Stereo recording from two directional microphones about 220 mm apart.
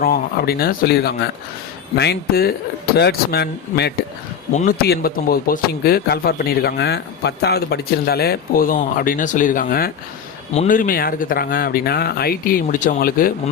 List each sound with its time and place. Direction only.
0.0 s a man's voice: 40° left (ahead or behind)